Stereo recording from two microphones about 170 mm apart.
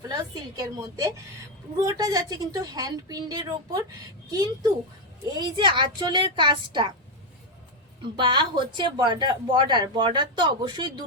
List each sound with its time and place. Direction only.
0.1 s speech: 20° right (ahead or behind)
8.0 s speech: 30° right (ahead or behind)